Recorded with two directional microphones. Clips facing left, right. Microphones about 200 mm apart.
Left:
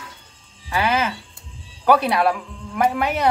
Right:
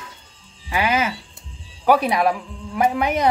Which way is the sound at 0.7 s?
15° right (ahead or behind).